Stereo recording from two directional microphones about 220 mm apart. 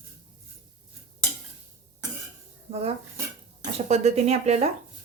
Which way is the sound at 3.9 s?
30° right (ahead or behind).